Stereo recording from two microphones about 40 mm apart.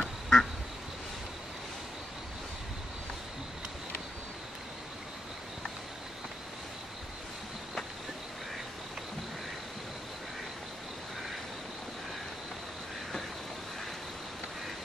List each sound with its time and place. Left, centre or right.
0.0 s quack: centre